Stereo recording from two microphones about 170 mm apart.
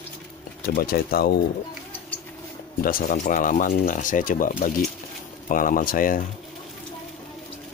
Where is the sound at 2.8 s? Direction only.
55° left (ahead or behind).